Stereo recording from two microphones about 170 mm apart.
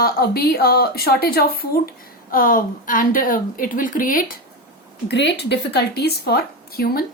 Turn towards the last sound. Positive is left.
turn(degrees=65)  # may be behind; listen again after turning